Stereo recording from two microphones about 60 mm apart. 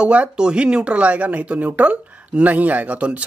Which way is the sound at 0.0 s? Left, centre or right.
Right.